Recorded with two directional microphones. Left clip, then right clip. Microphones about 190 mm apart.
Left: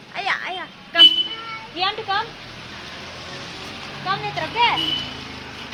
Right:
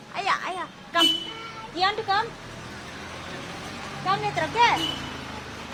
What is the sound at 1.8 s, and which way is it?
Speech, 20° right (ahead or behind).